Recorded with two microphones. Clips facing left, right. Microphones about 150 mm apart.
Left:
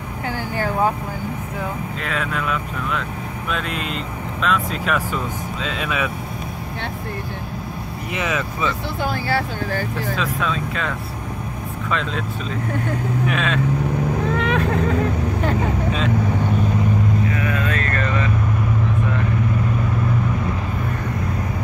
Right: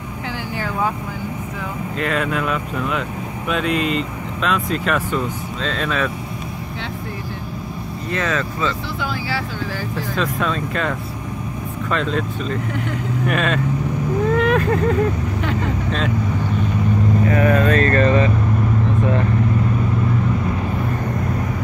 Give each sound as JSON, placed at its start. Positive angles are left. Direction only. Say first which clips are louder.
{"t": 2.0, "sound": "speech", "louder": "right 7 dB", "side_deg": 0}
{"t": 8.1, "sound": "speech", "louder": "right 2 dB", "side_deg": 15}
{"t": 9.0, "sound": "speech", "louder": "left 4 dB", "side_deg": 50}
{"t": 10.1, "sound": "speech", "louder": "right 4 dB", "side_deg": 0}
{"t": 14.3, "sound": "vehicle", "louder": "right 5 dB", "side_deg": 0}
{"t": 17.3, "sound": "speech", "louder": "right 7 dB", "side_deg": -45}